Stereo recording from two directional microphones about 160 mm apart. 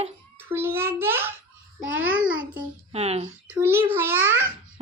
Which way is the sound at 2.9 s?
40° right (ahead or behind).